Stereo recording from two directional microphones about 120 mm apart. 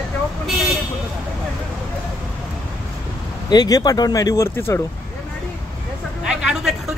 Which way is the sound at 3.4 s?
35° left (ahead or behind).